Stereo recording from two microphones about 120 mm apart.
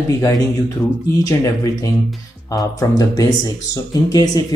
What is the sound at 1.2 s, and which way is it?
Speech, 30° left (ahead or behind).